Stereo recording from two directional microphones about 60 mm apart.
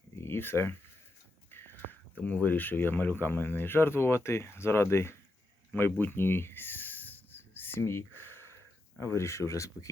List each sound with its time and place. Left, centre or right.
0.2 s speech: left
5.7 s a sound: left
9.0 s speech: left